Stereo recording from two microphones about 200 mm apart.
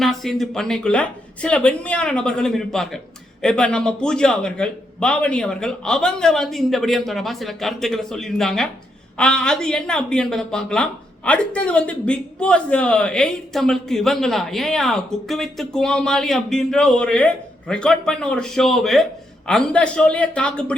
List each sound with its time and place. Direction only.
0.0 s a man's voice: centre (ahead or behind)